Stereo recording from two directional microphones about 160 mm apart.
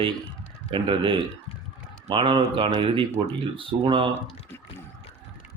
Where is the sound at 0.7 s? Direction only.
30° right (ahead or behind).